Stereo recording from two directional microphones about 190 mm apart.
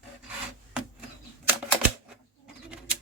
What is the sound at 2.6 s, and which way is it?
Bird, 5° right (ahead or behind).